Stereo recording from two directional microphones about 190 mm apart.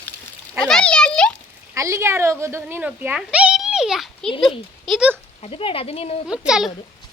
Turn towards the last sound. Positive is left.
turn(degrees=-5)  # may be behind; listen again after turning